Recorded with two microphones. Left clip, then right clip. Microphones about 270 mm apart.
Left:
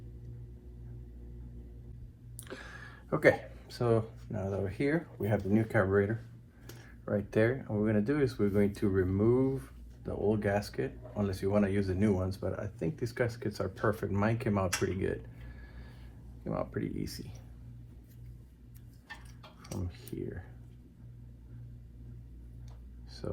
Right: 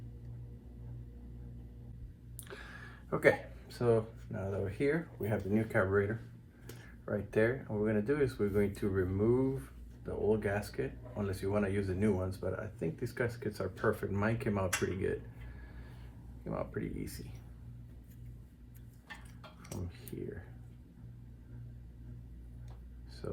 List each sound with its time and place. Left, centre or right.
2.5 s speech: left
16.4 s speech: left
23.2 s speech: left